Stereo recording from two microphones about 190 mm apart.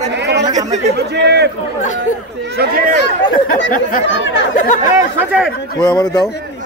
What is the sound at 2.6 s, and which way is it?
Speech, 50° right (ahead or behind).